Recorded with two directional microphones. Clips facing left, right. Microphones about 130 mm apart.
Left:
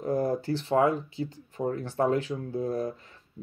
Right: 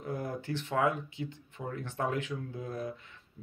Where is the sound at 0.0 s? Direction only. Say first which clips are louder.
Left 9 dB; 40° left (ahead or behind).